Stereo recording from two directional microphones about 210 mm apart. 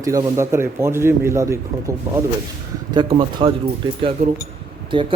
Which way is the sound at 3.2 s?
25° right (ahead or behind).